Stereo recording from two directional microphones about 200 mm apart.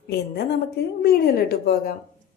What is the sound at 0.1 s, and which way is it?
A woman's voice, 55° left (ahead or behind).